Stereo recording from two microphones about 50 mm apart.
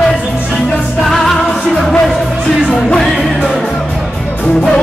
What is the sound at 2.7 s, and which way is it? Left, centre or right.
Music, centre.